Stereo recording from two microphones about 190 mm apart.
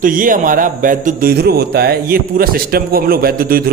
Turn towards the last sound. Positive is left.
turn(degrees=-50)  # may be behind; listen again after turning